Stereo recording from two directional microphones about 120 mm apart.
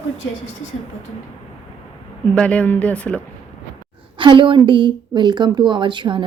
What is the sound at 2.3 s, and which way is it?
Speech, 10° left (ahead or behind).